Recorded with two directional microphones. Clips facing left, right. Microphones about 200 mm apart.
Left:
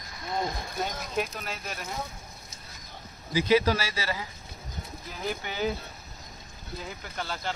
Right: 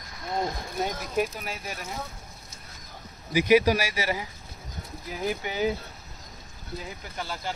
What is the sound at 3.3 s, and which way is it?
Speech, 15° right (ahead or behind).